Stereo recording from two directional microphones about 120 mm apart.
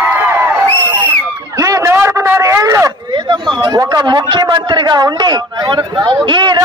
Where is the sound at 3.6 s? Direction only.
35° right (ahead or behind).